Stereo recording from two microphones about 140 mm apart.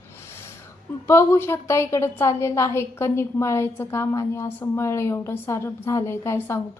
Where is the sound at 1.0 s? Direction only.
20° left (ahead or behind).